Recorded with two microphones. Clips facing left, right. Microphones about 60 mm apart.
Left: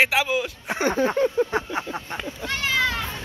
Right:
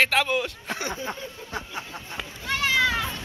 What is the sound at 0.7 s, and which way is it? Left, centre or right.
Speech, centre.